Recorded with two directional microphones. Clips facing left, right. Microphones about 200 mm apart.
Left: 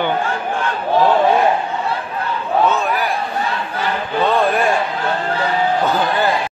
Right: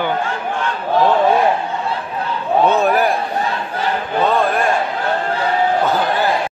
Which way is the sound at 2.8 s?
45° right (ahead or behind).